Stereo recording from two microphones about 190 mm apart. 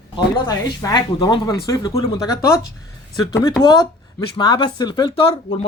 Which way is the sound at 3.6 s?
20° left (ahead or behind).